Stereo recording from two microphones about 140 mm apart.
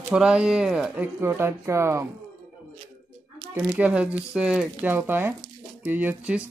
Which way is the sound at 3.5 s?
10° right (ahead or behind).